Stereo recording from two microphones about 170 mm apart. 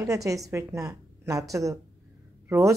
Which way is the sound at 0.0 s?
20° right (ahead or behind).